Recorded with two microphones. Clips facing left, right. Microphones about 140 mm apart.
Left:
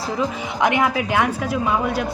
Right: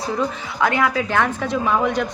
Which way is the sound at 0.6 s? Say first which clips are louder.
Even; 20° left (ahead or behind).